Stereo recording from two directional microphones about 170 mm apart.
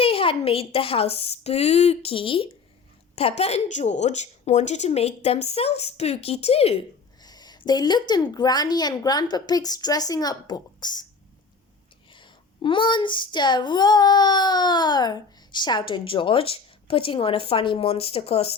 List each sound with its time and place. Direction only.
0.0 s a woman's voice: 35° left (ahead or behind)
7.2 s speech: 25° left (ahead or behind)
12.1 s speech: 30° left (ahead or behind)